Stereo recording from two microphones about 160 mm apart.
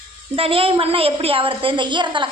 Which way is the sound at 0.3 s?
35° right (ahead or behind).